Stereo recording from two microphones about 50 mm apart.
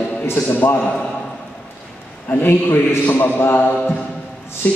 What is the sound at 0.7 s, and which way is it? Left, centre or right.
Speech, left.